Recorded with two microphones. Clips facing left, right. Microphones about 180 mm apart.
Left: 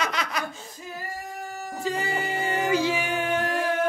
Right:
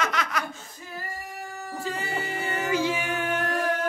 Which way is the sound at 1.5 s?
20° left (ahead or behind).